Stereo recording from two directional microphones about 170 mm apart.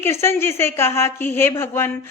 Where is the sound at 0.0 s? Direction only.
15° left (ahead or behind).